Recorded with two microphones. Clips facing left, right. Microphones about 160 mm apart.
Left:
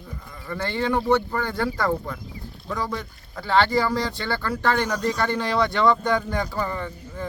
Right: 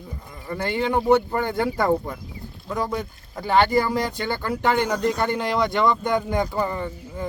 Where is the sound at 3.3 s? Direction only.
15° right (ahead or behind).